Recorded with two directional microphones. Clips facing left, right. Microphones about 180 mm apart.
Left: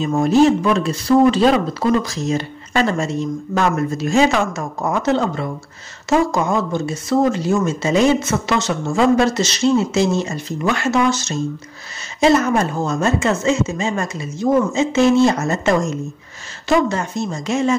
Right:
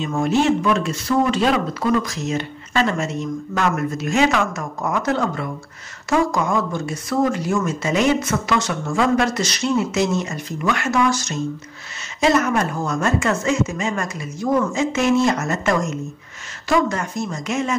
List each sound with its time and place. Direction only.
0.0 s speech: 35° left (ahead or behind)